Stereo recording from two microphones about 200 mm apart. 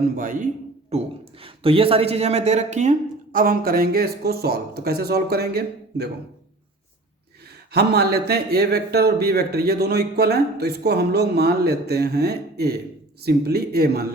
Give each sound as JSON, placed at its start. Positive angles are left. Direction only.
{"t": 0.2, "sound": "a man's voice", "side_deg": -45}
{"t": 7.7, "sound": "a man's voice", "side_deg": -55}